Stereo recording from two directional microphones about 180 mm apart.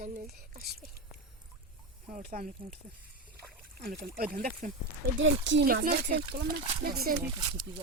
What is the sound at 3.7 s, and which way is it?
Speech, 55° right (ahead or behind).